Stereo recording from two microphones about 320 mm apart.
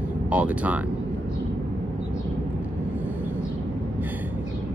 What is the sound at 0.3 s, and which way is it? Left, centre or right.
Speech, centre.